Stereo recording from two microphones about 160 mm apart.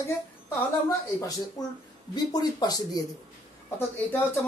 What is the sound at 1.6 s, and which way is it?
Speech, 25° left (ahead or behind).